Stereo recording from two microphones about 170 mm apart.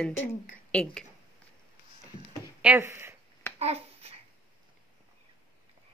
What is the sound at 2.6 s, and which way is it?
Speech, 10° right (ahead or behind).